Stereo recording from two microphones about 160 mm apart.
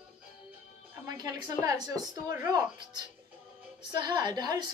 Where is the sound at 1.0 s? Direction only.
25° right (ahead or behind).